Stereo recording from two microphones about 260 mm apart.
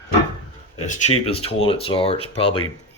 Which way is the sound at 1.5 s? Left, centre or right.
Left.